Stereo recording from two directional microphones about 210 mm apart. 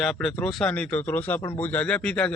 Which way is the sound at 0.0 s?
Centre (ahead or behind).